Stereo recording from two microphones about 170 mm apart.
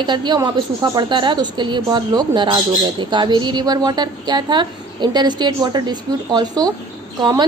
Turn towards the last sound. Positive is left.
turn(degrees=-25)  # may be behind; listen again after turning